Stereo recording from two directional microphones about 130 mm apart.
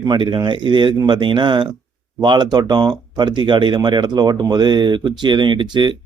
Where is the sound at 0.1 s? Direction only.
35° right (ahead or behind).